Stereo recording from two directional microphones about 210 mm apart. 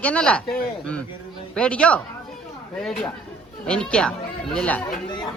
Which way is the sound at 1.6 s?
5° left (ahead or behind).